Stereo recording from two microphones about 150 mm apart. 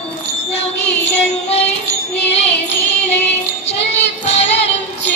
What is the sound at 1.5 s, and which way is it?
Music, 45° left (ahead or behind).